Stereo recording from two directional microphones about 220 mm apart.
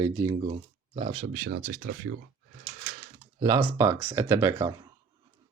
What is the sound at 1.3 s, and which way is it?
Speech, 40° right (ahead or behind).